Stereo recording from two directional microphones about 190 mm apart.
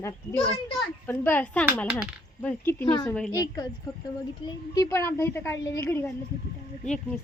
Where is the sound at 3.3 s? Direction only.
20° left (ahead or behind).